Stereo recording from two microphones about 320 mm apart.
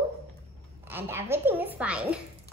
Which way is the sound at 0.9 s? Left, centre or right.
Centre.